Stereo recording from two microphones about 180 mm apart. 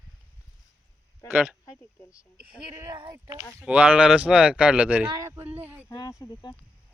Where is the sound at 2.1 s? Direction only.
5° right (ahead or behind).